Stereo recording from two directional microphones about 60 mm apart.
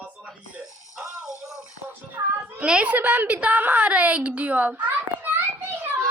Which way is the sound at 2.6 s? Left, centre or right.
Centre.